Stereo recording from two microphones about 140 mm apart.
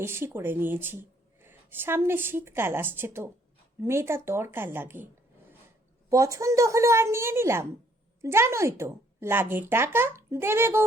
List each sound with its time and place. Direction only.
0.0 s a woman's voice: 15° right (ahead or behind)
6.1 s a woman's voice: 25° right (ahead or behind)